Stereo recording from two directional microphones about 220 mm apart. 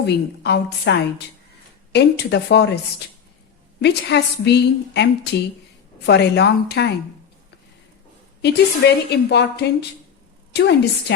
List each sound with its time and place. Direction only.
0.0 s a woman's voice: 50° left (ahead or behind)
3.8 s a woman's voice: 50° left (ahead or behind)
8.4 s a woman's voice: 50° left (ahead or behind)